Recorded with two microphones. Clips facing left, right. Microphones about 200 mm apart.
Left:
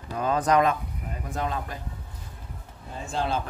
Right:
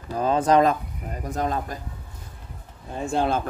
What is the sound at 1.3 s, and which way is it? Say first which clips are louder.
Speech: right 4 dB; 40° right (ahead or behind).